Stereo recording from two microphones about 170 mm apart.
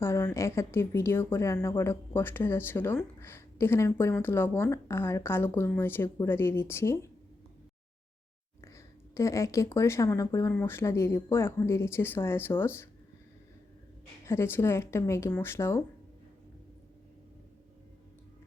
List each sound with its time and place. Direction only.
0.0 s speech: 15° left (ahead or behind)
8.6 s speech: 15° left (ahead or behind)
14.3 s speech: 15° left (ahead or behind)